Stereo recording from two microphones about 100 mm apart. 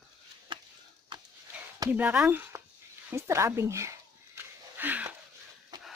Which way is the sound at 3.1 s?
30° right (ahead or behind).